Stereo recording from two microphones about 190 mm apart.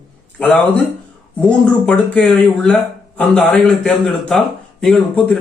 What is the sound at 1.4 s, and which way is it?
Speech, 5° left (ahead or behind).